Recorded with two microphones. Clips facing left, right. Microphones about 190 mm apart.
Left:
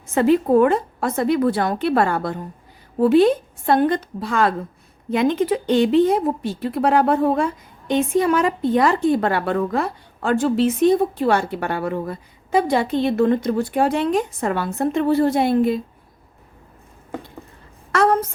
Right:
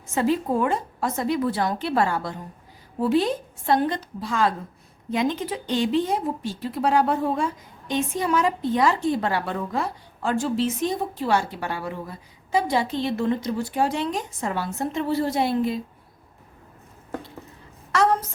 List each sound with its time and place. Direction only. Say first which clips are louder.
0.1 s speech: left 7 dB; 60° left (ahead or behind)
17.9 s speech: left 4 dB; 55° left (ahead or behind)